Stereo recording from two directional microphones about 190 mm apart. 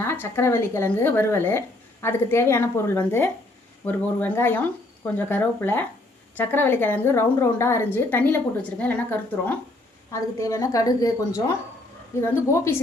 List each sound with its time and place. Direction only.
0.0 s speech: 10° left (ahead or behind)